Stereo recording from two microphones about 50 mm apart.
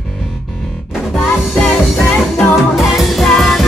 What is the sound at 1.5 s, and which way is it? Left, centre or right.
Music, centre.